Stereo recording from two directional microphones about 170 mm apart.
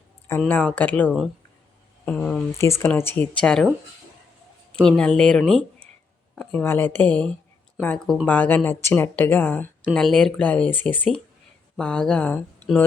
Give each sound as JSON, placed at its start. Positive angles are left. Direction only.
{"t": 0.3, "sound": "speech", "side_deg": 10}
{"t": 4.8, "sound": "speech", "side_deg": 5}